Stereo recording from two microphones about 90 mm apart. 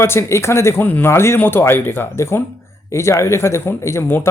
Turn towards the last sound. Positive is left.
turn(degrees=25)  # may be behind; listen again after turning